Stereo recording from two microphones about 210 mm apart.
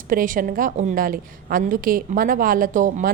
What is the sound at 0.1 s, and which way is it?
A woman's voice, 40° right (ahead or behind).